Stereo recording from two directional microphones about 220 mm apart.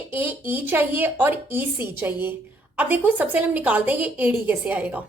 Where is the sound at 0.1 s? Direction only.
10° right (ahead or behind).